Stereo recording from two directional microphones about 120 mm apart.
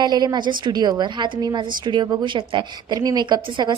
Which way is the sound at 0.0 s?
35° right (ahead or behind).